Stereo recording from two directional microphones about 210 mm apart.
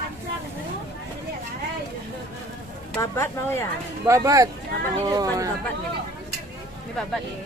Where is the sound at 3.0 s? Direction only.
10° left (ahead or behind).